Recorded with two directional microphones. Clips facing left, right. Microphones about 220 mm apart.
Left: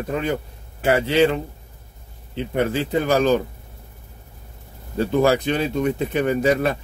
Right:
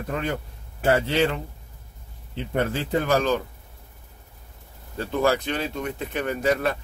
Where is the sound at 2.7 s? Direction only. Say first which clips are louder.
Left 3 dB; 15° left (ahead or behind).